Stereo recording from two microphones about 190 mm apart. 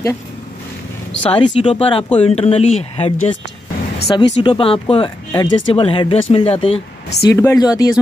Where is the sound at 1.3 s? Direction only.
30° left (ahead or behind).